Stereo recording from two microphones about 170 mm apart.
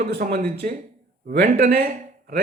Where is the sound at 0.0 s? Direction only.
70° right (ahead or behind).